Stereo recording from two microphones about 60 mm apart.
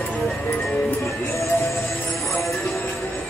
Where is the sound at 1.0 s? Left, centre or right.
Left.